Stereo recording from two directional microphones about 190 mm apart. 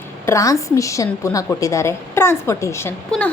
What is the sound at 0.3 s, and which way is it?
A woman's voice, 15° left (ahead or behind).